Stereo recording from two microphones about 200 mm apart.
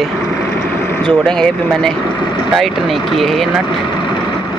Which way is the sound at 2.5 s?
Centre (ahead or behind).